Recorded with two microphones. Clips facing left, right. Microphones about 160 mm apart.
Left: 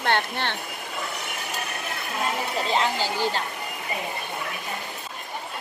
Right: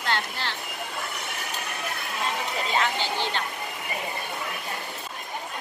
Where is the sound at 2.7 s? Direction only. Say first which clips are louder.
Left 2 dB; 35° left (ahead or behind).